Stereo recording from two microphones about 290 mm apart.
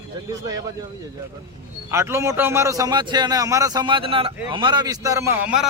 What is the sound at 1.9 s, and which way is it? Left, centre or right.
A man's voice, centre.